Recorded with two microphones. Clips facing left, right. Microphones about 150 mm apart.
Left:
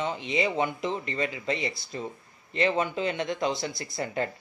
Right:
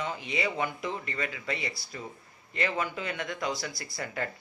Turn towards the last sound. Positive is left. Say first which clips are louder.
# left 5 dB
turn(degrees=25)  # may be behind; listen again after turning